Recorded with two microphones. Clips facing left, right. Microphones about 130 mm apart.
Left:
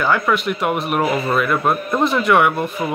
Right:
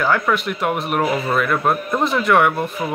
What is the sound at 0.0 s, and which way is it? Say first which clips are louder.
A man's voice: left 1 dB; centre (ahead or behind).